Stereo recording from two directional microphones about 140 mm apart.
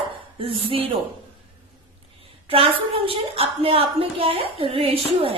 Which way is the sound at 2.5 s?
40° right (ahead or behind).